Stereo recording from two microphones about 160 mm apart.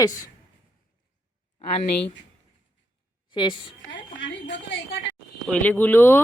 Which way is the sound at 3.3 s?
30° left (ahead or behind).